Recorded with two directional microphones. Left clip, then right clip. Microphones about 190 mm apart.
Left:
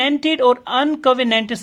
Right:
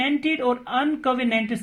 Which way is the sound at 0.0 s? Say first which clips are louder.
Left 7 dB; 35° left (ahead or behind).